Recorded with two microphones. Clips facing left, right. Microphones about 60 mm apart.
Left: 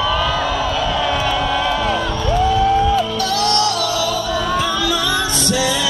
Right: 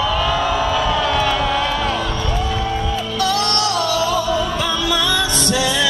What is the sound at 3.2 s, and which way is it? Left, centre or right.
Music, right.